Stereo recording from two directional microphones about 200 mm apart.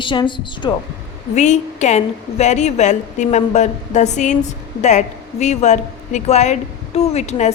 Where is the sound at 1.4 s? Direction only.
35° left (ahead or behind).